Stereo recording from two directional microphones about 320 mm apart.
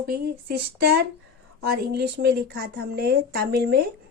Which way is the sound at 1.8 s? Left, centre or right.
Right.